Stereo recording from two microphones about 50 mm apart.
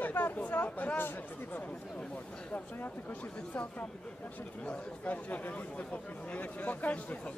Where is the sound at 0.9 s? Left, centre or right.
Left.